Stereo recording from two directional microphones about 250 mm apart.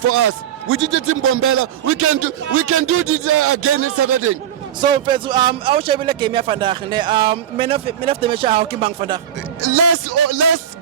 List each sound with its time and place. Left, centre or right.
0.7 s a man's voice: right
4.8 s a man's voice: centre
9.6 s speech: right